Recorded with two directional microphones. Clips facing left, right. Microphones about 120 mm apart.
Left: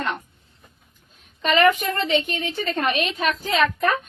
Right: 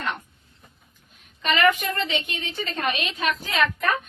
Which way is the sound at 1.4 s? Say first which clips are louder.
Left 3 dB; 35° left (ahead or behind).